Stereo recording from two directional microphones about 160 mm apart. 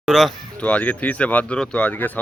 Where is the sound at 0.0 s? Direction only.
Centre (ahead or behind).